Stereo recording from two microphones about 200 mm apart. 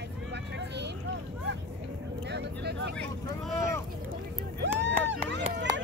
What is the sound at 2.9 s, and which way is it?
Speech, centre (ahead or behind).